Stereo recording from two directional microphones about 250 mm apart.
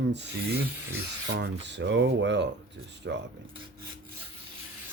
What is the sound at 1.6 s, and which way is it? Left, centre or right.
Speech, right.